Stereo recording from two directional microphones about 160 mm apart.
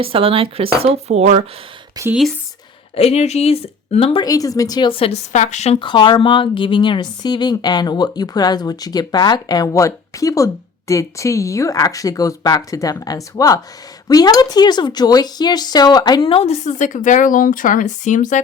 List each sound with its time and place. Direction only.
0.0 s speech: 35° right (ahead or behind)
2.0 s speech: 20° right (ahead or behind)
2.9 s speech: 40° left (ahead or behind)
4.3 s speech: 20° left (ahead or behind); by 18.3 s 50° left (ahead or behind)